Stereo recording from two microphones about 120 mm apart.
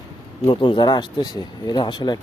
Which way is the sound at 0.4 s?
45° left (ahead or behind).